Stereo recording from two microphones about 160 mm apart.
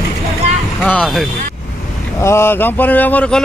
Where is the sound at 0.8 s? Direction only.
5° left (ahead or behind).